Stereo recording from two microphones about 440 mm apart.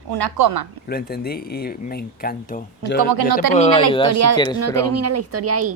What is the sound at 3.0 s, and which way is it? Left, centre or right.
Speech, right.